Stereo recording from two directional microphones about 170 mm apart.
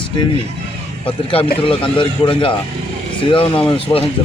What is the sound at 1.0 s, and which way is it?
A man's voice, 35° left (ahead or behind).